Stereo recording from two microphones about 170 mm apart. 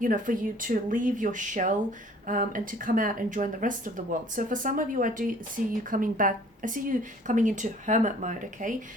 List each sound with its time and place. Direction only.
0.0 s a woman's voice: 55° right (ahead or behind)